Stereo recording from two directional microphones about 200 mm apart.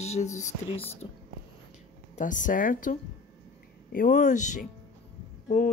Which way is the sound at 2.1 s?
40° left (ahead or behind).